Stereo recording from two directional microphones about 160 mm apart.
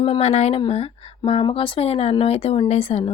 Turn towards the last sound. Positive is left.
turn(degrees=40)  # may be behind; listen again after turning